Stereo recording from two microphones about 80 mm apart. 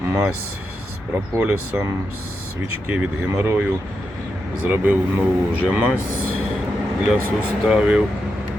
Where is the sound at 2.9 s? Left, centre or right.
Right.